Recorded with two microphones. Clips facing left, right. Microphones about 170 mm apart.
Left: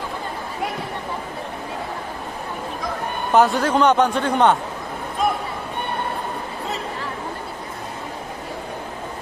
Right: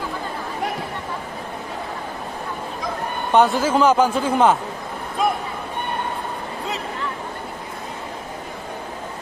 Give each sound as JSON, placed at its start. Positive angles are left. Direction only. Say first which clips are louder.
{"t": 3.3, "sound": "a man's voice", "louder": "even", "side_deg": 0}